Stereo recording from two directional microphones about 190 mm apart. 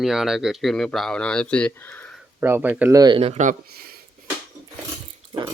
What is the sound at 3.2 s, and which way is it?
Speech, 35° right (ahead or behind).